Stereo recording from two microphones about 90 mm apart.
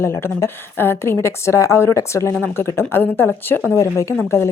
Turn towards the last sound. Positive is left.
turn(degrees=30)  # may be behind; listen again after turning